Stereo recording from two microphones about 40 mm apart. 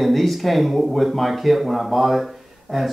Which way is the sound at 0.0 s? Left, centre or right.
Centre.